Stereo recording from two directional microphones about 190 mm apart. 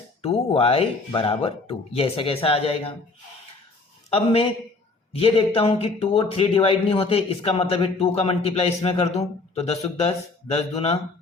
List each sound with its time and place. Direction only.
0.2 s speech: 30° left (ahead or behind)
4.1 s a man's voice: 30° left (ahead or behind)